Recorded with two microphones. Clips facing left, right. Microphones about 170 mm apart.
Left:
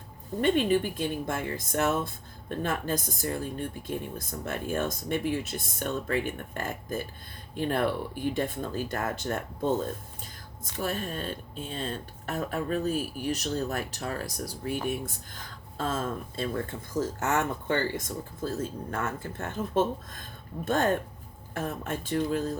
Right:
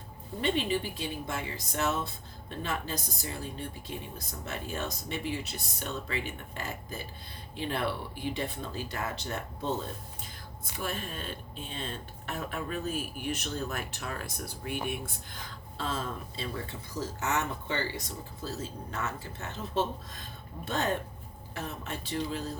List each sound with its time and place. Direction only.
0.4 s speech: 50° left (ahead or behind)